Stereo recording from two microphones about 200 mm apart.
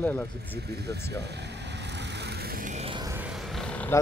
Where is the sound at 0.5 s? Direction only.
55° right (ahead or behind); by 2.9 s 35° right (ahead or behind).